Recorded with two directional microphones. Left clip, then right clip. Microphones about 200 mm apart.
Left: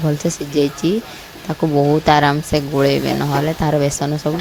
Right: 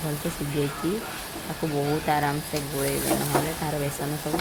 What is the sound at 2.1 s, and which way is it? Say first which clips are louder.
Speech: left 12 dB; 50° left (ahead or behind).